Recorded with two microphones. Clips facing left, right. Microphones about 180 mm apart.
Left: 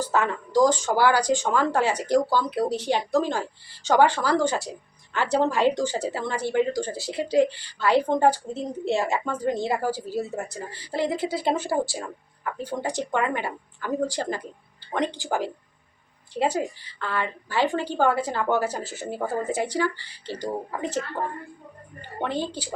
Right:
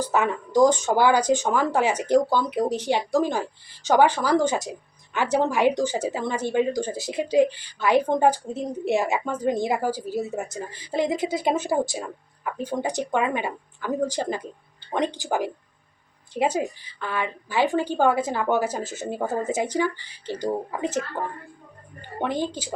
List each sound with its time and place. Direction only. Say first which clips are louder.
0.0 s speech: right 1 dB; 15° right (ahead or behind)
22.2 s speech: right 2 dB; 15° right (ahead or behind)